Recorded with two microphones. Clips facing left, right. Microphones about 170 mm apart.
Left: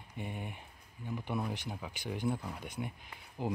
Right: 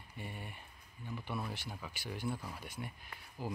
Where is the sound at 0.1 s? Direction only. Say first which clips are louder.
Left 5 dB; 15° left (ahead or behind).